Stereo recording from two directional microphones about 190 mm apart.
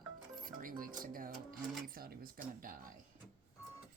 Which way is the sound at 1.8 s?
50° right (ahead or behind).